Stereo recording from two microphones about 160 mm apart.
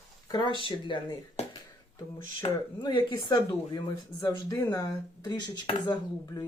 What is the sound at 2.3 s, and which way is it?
Speech, 25° left (ahead or behind).